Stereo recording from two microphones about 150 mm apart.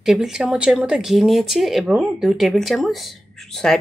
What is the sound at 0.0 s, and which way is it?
Speech, 5° right (ahead or behind).